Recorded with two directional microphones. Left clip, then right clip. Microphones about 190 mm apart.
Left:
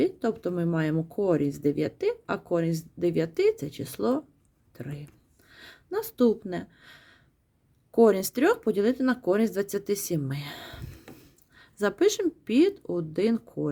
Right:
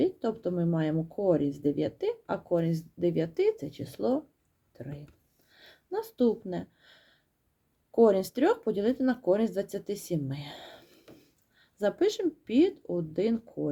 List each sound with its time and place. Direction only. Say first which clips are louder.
0.0 s speech: left 2 dB; 35° left (ahead or behind)
5.5 s a sound: left 2 dB; 30° left (ahead or behind)
7.9 s speech: left 2 dB; 30° left (ahead or behind)